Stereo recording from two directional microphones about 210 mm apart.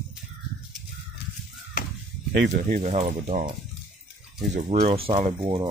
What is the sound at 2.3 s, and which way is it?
Speech, 55° right (ahead or behind).